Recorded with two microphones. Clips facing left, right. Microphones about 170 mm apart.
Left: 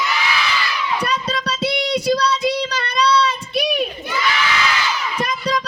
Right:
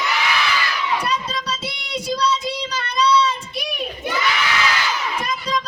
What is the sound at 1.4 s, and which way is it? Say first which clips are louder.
Child singing: left 9 dB; 75° left (ahead or behind).